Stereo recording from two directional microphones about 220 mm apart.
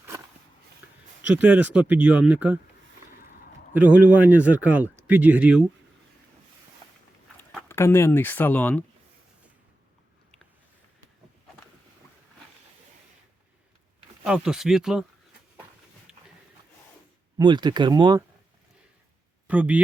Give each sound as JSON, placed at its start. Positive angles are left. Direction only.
{"t": 0.8, "sound": "a sound", "side_deg": -5}
{"t": 1.2, "sound": "speech", "side_deg": -10}
{"t": 3.8, "sound": "speech", "side_deg": -5}
{"t": 7.7, "sound": "speech", "side_deg": 10}
{"t": 14.3, "sound": "speech", "side_deg": -5}
{"t": 16.1, "sound": "a sound", "side_deg": -5}
{"t": 17.3, "sound": "speech", "side_deg": -20}
{"t": 19.5, "sound": "speech", "side_deg": -5}